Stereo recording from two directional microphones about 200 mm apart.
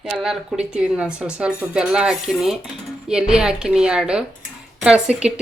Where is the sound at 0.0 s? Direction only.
Centre (ahead or behind).